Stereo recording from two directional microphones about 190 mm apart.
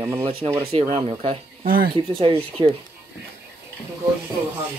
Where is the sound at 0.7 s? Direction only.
30° right (ahead or behind).